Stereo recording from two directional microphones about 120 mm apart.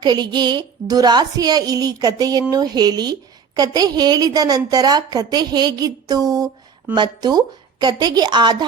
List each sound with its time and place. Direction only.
0.0 s a woman's voice: 35° right (ahead or behind)